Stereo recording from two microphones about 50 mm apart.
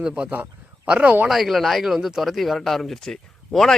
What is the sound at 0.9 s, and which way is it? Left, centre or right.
Speech, right.